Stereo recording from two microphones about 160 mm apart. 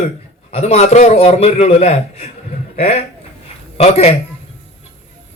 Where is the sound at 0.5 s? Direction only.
40° left (ahead or behind).